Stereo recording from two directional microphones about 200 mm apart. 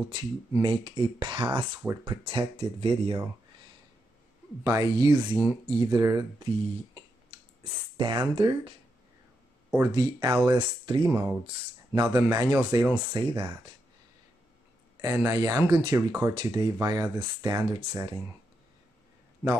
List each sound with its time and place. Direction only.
0.6 s speech: 25° right (ahead or behind)
4.6 s speech: 20° right (ahead or behind)
15.0 s speech: 15° right (ahead or behind)